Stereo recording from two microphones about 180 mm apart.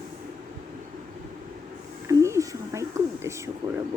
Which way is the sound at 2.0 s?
15° right (ahead or behind).